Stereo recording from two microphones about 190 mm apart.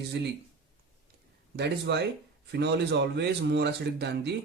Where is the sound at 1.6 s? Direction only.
60° right (ahead or behind).